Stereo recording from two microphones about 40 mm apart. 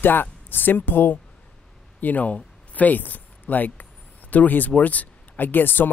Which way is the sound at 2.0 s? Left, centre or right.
Left.